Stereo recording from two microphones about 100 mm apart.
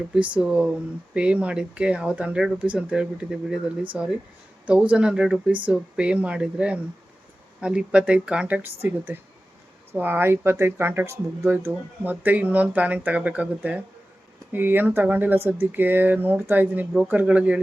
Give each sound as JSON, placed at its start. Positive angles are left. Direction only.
{"t": 0.1, "sound": "speech", "side_deg": -10}